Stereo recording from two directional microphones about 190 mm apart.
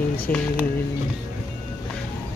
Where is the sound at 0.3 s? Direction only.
10° left (ahead or behind).